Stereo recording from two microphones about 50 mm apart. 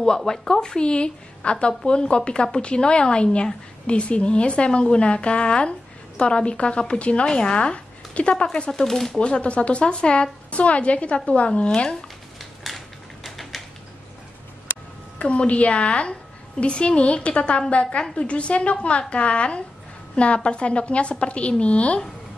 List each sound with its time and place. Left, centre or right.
0.0 s a woman's voice: centre
9.2 s a woman's voice: left
12.4 s typewriter: centre
15.1 s a woman's voice: left